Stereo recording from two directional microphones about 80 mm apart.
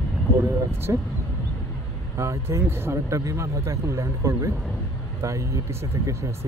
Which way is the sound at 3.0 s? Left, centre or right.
Right.